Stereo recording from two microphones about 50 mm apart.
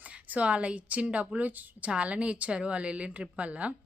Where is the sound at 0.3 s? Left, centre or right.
Right.